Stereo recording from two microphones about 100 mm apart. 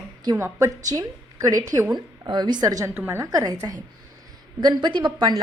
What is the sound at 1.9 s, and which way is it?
Speech, 45° right (ahead or behind).